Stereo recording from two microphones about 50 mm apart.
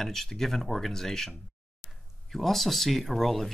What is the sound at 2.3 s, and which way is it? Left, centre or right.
Speech, centre.